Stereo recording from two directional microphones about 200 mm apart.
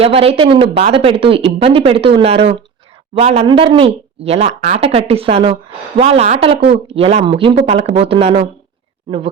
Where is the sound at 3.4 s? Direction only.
25° right (ahead or behind).